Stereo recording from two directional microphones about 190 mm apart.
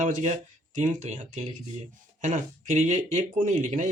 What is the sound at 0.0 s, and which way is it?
Speech, 40° right (ahead or behind).